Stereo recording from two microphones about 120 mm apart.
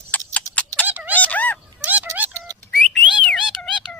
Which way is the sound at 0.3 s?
10° left (ahead or behind).